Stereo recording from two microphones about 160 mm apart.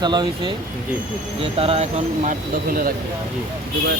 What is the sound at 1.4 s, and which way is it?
Speech, 35° right (ahead or behind).